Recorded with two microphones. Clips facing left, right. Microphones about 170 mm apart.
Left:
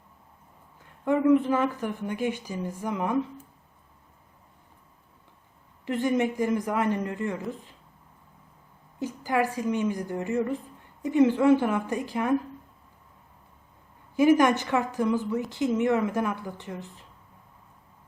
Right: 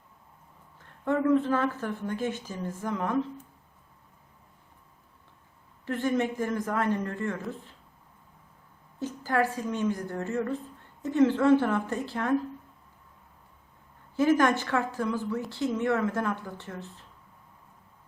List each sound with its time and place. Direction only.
0.8 s a woman's voice: 10° left (ahead or behind)
5.8 s a woman's voice: 15° left (ahead or behind)
9.0 s a woman's voice: 15° left (ahead or behind)
14.2 s a woman's voice: 15° left (ahead or behind)